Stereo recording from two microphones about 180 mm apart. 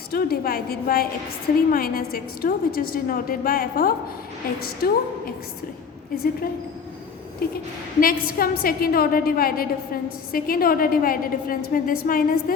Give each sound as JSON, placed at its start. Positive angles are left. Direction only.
{"t": 0.1, "sound": "a woman's voice", "side_deg": 55}
{"t": 7.4, "sound": "a woman's voice", "side_deg": 55}